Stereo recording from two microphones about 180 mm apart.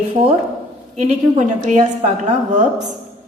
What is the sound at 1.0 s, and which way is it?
A woman's voice, 40° right (ahead or behind).